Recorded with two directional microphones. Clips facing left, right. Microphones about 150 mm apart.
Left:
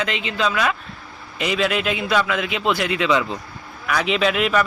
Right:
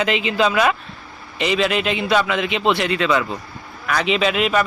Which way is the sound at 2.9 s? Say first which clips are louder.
Even; 15° left (ahead or behind).